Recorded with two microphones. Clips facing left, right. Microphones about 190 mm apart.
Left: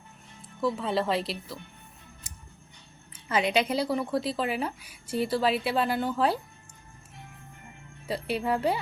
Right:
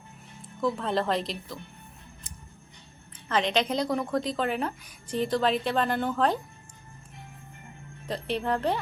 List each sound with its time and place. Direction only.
0.6 s a woman's voice: 5° left (ahead or behind)
3.2 s a woman's voice: 10° left (ahead or behind)
8.0 s a woman's voice: 10° left (ahead or behind)